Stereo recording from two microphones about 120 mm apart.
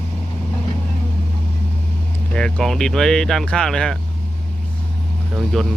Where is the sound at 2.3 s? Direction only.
5° left (ahead or behind).